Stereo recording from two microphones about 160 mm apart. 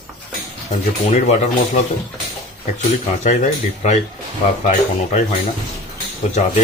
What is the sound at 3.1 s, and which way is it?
Speech, 50° left (ahead or behind).